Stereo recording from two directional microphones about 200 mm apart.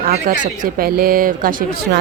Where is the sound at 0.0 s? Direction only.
45° right (ahead or behind).